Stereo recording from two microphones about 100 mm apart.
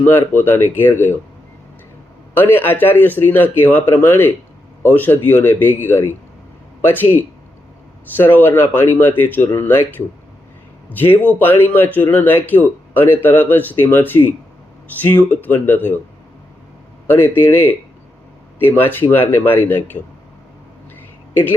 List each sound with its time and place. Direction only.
0.0 s speech: 20° left (ahead or behind)
2.3 s speech: 20° left (ahead or behind)
10.8 s speech: 20° left (ahead or behind)
17.1 s speech: 20° left (ahead or behind)